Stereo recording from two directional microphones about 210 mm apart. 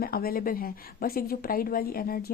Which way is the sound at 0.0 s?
45° left (ahead or behind).